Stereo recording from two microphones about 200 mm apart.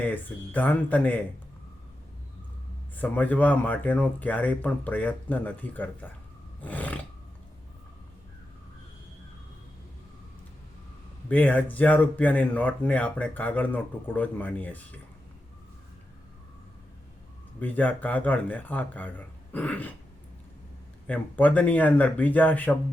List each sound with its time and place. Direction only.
0.0 s speech: 10° left (ahead or behind)
2.9 s speech: 10° left (ahead or behind)
6.6 s roar: 5° left (ahead or behind)
11.3 s speech: 10° left (ahead or behind)
17.6 s speech: 10° left (ahead or behind)
21.1 s speech: 10° left (ahead or behind)